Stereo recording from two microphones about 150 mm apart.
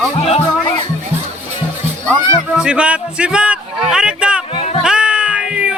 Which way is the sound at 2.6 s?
5° right (ahead or behind).